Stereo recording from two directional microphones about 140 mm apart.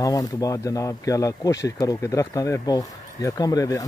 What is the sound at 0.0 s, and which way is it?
Speech, 25° left (ahead or behind).